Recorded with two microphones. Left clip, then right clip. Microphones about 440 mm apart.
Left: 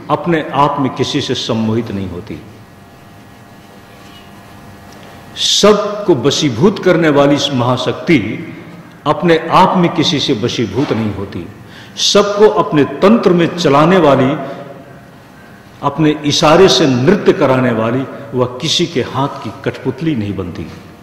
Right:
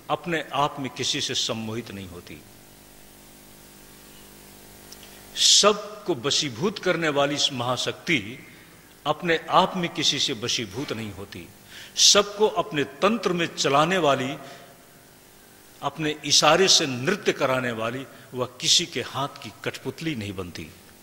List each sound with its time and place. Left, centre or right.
0.1 s a man's voice: right
5.3 s a man's voice: right
15.8 s a man's voice: right